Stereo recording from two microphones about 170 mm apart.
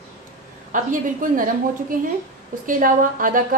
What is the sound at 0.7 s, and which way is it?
A woman's voice, 50° right (ahead or behind).